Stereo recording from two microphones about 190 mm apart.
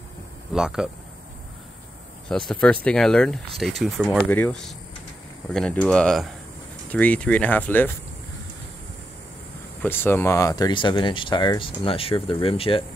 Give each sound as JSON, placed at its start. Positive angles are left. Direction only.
{"t": 0.5, "sound": "speech", "side_deg": -5}
{"t": 2.2, "sound": "speech", "side_deg": 5}
{"t": 9.8, "sound": "speech", "side_deg": 10}